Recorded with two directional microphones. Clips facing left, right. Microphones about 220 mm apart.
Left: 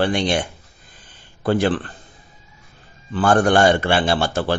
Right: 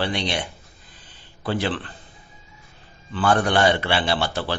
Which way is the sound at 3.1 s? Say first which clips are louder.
Left 5 dB; 45° left (ahead or behind).